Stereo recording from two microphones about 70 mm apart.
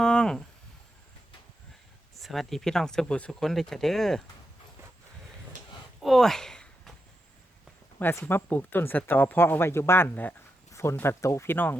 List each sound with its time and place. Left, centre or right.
0.0 s speech: centre
2.1 s speech: centre
6.0 s a sound: centre
8.0 s speech: left
10.7 s a sound: left
11.0 s speech: left
11.4 s speech: left